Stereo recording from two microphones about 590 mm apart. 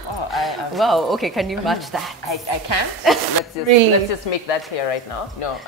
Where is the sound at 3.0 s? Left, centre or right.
Centre.